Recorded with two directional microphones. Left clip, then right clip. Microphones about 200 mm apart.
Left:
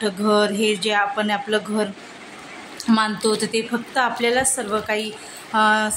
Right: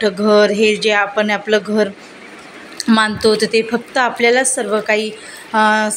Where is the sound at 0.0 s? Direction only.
15° right (ahead or behind).